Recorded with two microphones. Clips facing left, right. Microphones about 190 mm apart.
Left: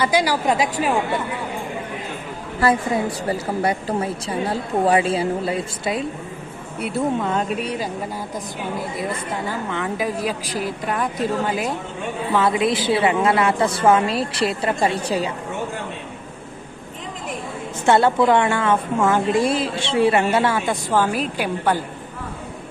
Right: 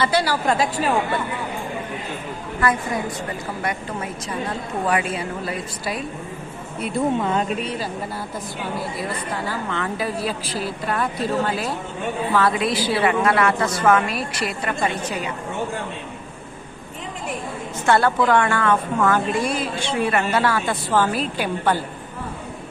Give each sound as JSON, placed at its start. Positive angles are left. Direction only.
{"t": 0.0, "sound": "a woman's voice", "side_deg": 15}
{"t": 2.6, "sound": "a woman's voice", "side_deg": 30}
{"t": 6.7, "sound": "speech", "side_deg": 10}
{"t": 7.2, "sound": "speech", "side_deg": 0}
{"t": 7.6, "sound": "a woman's voice", "side_deg": 15}
{"t": 9.0, "sound": "a woman's voice", "side_deg": 20}
{"t": 17.8, "sound": "a woman's voice", "side_deg": 25}